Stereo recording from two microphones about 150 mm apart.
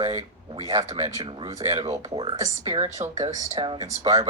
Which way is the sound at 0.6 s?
25° right (ahead or behind).